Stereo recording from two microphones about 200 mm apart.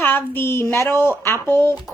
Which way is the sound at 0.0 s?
10° left (ahead or behind).